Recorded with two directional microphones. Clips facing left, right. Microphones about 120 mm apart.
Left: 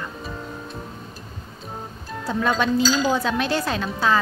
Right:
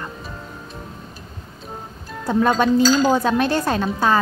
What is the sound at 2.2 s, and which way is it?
Speech, 45° right (ahead or behind).